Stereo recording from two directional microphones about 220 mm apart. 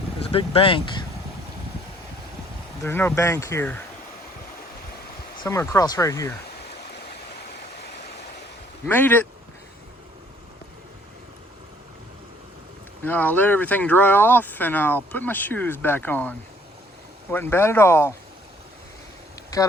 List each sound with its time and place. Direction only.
0.2 s speech: 25° left (ahead or behind)
2.8 s speech: 10° left (ahead or behind)
5.4 s speech: 15° left (ahead or behind)
8.9 s speech: 10° left (ahead or behind)
13.0 s speech: 10° left (ahead or behind)
17.3 s speech: 10° left (ahead or behind)